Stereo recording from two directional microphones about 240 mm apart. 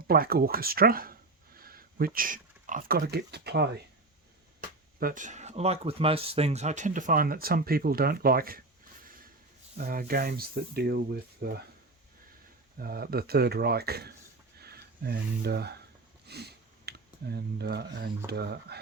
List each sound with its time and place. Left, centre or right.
0.1 s speech: right
4.9 s speech: right
9.7 s speech: right
12.8 s speech: right
16.2 s a sound: right
18.3 s speech: right